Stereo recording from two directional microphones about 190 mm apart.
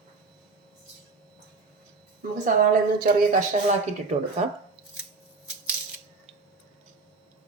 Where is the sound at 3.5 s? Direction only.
35° right (ahead or behind).